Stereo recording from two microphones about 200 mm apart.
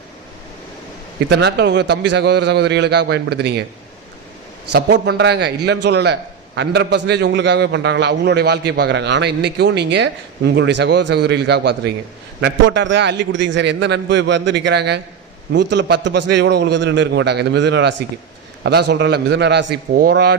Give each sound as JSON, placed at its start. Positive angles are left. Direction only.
{"t": 1.3, "sound": "a man's voice", "side_deg": -55}
{"t": 4.7, "sound": "a man's voice", "side_deg": -55}